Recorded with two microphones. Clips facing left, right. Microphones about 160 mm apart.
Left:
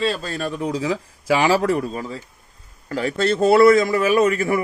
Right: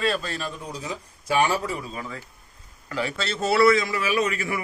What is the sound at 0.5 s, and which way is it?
Speech, 90° left.